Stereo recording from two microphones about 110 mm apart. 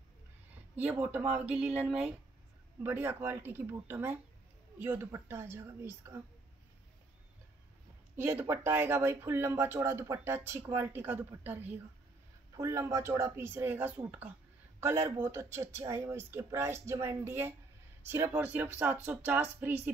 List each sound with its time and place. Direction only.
0.7 s speech: 15° right (ahead or behind)
2.8 s speech: 20° right (ahead or behind)
8.2 s speech: 20° right (ahead or behind)